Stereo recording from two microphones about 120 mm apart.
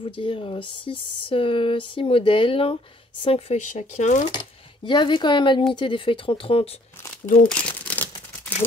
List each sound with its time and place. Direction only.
0.0 s speech: 45° left (ahead or behind)
3.6 s speech: 85° left
4.8 s speech: 40° left (ahead or behind)
7.4 s crumpling: 10° left (ahead or behind)